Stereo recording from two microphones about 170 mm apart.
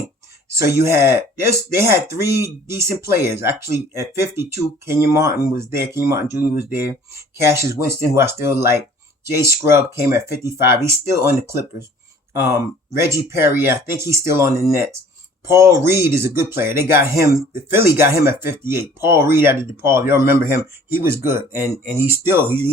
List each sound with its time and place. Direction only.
0.5 s speech: 15° right (ahead or behind)
6.5 s speech: 60° left (ahead or behind)
7.4 s speech: 15° right (ahead or behind)